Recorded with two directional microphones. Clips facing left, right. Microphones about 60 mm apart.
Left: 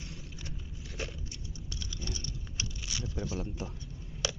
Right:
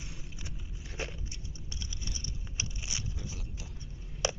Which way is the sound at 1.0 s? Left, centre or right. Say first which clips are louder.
Right 1 dB; right.